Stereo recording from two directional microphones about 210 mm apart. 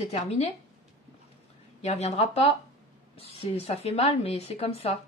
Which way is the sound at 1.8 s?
30° left (ahead or behind).